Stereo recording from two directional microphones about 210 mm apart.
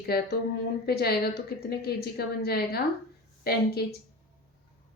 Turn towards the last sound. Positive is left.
turn(degrees=50)  # may be behind; listen again after turning